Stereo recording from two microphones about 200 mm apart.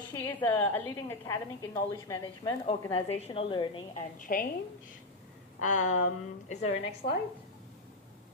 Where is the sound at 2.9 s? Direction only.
30° left (ahead or behind).